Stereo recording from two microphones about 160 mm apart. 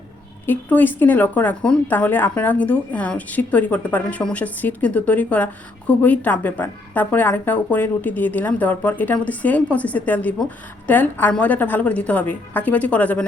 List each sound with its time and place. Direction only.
0.4 s speech: 10° left (ahead or behind)